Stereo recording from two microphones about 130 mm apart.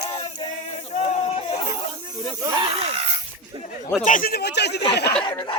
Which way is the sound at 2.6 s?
50° right (ahead or behind).